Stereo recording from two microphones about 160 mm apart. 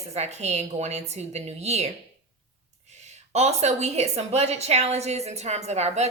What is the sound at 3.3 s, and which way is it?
A woman's voice, 45° right (ahead or behind).